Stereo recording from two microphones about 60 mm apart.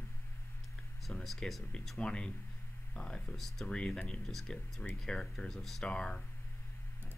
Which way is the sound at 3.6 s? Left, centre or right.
Centre.